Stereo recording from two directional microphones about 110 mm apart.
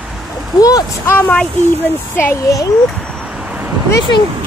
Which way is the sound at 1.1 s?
20° left (ahead or behind).